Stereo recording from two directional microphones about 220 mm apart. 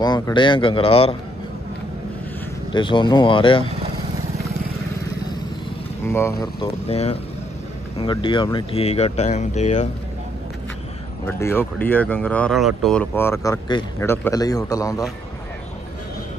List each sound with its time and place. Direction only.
0.0 s speech: 20° left (ahead or behind)
2.7 s speech: 20° left (ahead or behind)
6.0 s speech: 10° left (ahead or behind)
6.4 s speech: 25° left (ahead or behind)
11.2 s speech: 10° left (ahead or behind)